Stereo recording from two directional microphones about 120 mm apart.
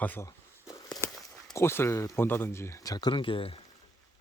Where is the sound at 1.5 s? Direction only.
20° left (ahead or behind).